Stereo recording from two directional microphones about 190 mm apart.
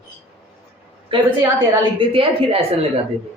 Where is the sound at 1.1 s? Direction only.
25° right (ahead or behind).